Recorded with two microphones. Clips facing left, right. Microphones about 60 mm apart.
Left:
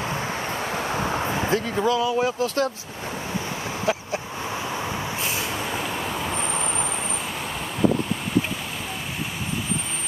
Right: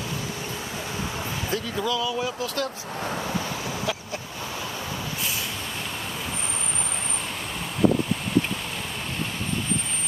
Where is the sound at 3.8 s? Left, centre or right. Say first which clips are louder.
Left 5 dB; left.